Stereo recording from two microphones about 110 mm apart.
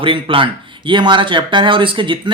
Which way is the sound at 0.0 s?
50° right (ahead or behind).